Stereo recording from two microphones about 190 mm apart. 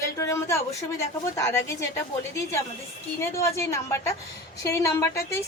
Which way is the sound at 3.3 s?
15° left (ahead or behind).